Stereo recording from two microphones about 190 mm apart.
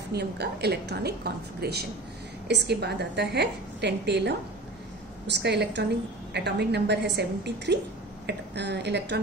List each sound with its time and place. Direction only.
0.1 s a woman's voice: 60° right (ahead or behind)